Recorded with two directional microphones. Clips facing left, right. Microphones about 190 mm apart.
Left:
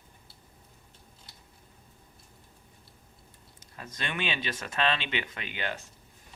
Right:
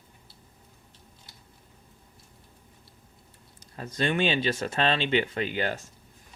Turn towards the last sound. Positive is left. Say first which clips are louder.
# right 7 dB
turn(degrees=-40)  # may be behind; listen again after turning